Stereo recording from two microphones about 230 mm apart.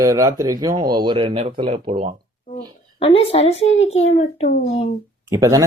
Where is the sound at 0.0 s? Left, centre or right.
Centre.